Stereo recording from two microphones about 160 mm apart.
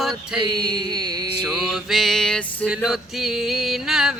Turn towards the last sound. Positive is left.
turn(degrees=0)  # may be behind; listen again after turning